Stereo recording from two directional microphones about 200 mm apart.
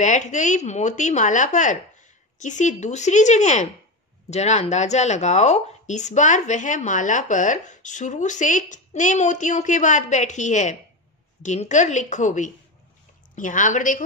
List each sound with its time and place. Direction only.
0.0 s speech: 35° left (ahead or behind)